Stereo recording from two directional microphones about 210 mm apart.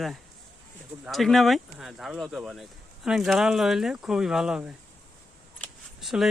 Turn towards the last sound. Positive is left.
turn(degrees=0)  # may be behind; listen again after turning